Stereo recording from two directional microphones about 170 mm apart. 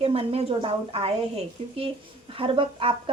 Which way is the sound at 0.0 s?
35° right (ahead or behind).